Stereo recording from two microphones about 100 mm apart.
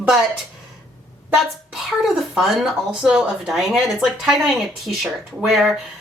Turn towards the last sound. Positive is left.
turn(degrees=0)  # may be behind; listen again after turning